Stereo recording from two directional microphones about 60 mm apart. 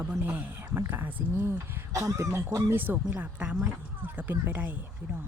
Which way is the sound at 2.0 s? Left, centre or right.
Right.